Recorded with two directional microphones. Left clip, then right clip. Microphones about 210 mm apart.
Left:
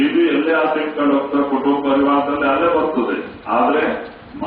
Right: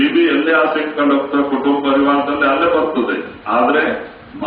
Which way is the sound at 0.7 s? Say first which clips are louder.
Right 2 dB; 10° right (ahead or behind).